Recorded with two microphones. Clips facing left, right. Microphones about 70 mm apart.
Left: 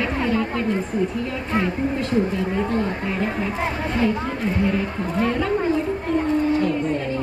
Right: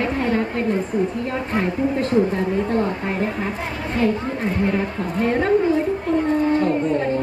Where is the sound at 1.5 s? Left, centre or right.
Right.